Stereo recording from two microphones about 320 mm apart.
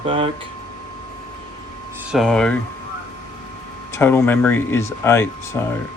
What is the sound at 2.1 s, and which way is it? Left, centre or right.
Speech, centre.